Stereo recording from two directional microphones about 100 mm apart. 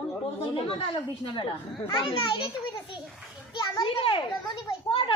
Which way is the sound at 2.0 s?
60° left (ahead or behind).